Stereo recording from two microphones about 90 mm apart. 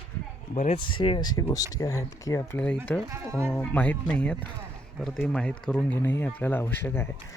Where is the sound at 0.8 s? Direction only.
65° left (ahead or behind).